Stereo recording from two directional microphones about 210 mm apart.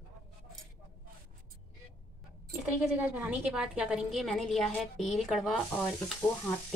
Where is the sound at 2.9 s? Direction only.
5° right (ahead or behind).